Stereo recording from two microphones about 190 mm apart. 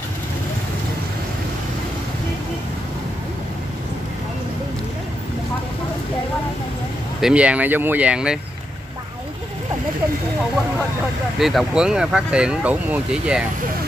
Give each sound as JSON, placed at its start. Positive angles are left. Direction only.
{"t": 7.2, "sound": "speech", "side_deg": -5}
{"t": 11.3, "sound": "speech", "side_deg": 0}